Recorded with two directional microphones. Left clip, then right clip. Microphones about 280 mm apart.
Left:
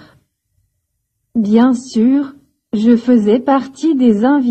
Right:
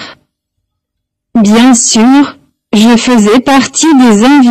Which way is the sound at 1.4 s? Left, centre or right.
Right.